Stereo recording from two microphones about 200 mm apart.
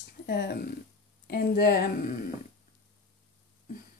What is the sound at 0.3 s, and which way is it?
Speech, 50° left (ahead or behind).